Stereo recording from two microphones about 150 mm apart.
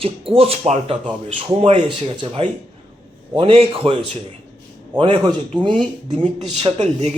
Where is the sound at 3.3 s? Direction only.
35° right (ahead or behind).